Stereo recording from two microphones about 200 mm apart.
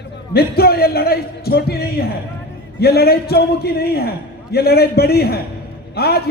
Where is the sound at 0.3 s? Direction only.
50° left (ahead or behind).